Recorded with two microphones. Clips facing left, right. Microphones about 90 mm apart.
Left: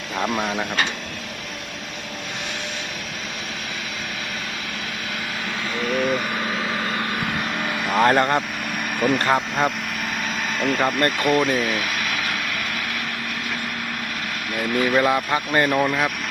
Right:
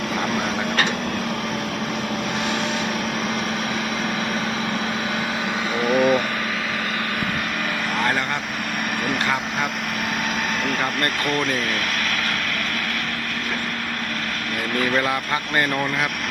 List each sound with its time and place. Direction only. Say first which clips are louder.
5.8 s vehicle: right 4 dB; 10° right (ahead or behind)
7.9 s vehicle: left 8 dB; 40° left (ahead or behind)
9.0 s speech: left 5 dB; centre (ahead or behind)
10.6 s speech: left 6 dB; centre (ahead or behind)
10.8 s speech: left 4 dB; 10° left (ahead or behind)
14.8 s speech: left 3 dB; 15° left (ahead or behind)